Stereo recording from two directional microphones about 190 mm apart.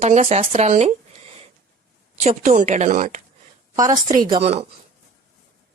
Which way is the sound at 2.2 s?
40° right (ahead or behind).